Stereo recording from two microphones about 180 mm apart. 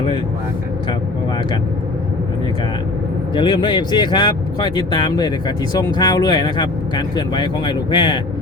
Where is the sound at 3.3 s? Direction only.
25° left (ahead or behind).